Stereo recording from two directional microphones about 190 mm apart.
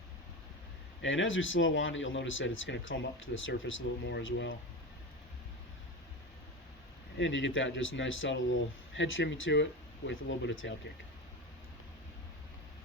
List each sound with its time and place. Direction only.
1.0 s speech: 90° left
7.2 s speech: 75° left (ahead or behind)